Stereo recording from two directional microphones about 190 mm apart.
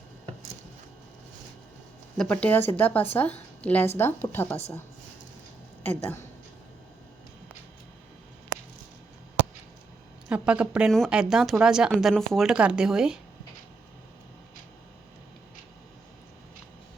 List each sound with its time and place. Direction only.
2.1 s speech: 5° left (ahead or behind)
6.0 s speech: 10° left (ahead or behind)
10.2 s speech: 5° right (ahead or behind)